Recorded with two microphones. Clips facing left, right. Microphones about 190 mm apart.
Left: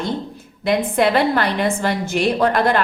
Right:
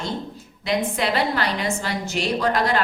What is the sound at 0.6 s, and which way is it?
A woman's voice, 55° left (ahead or behind).